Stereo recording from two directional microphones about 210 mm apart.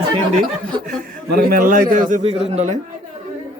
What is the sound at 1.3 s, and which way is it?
A man's voice, 45° right (ahead or behind).